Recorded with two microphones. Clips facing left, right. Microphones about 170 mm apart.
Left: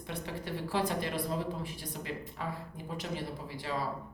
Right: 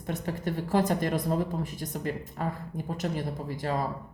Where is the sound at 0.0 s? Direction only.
45° right (ahead or behind).